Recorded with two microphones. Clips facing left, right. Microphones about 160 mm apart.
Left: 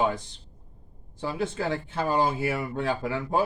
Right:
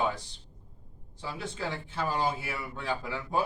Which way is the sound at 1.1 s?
60° left (ahead or behind).